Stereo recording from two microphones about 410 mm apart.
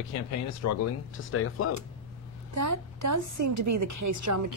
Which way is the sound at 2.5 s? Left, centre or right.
Right.